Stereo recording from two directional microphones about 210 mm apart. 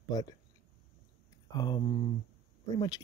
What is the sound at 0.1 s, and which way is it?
Speech, 15° left (ahead or behind).